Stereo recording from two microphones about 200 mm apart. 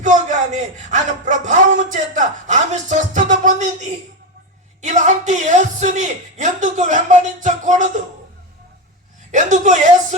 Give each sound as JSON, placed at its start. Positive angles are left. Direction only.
{"t": 0.0, "sound": "a man's voice", "side_deg": -40}
{"t": 4.8, "sound": "a man's voice", "side_deg": -35}
{"t": 9.3, "sound": "a man's voice", "side_deg": -35}